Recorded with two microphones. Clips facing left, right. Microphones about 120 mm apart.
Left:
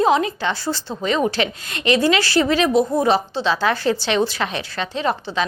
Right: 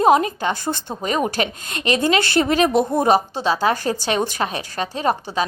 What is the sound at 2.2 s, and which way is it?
Speech, 55° right (ahead or behind).